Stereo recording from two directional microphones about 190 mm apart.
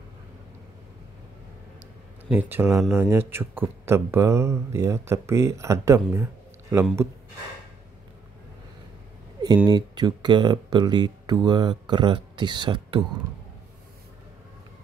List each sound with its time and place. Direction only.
2.2 s a man's voice: 10° right (ahead or behind)
6.1 s a sound: 15° right (ahead or behind)
9.7 s speech: 20° right (ahead or behind)